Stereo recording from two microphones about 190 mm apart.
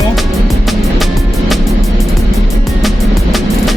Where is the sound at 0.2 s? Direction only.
Centre (ahead or behind).